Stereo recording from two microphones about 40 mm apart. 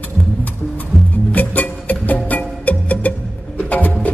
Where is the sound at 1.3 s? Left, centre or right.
Left.